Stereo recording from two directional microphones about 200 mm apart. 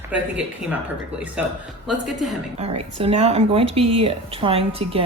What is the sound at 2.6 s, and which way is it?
Speech, 30° right (ahead or behind).